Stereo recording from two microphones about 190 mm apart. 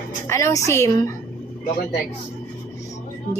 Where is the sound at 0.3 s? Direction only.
15° left (ahead or behind).